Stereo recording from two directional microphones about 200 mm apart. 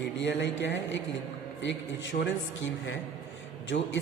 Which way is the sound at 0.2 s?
65° left (ahead or behind).